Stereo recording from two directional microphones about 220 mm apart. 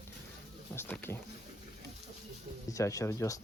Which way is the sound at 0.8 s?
10° left (ahead or behind).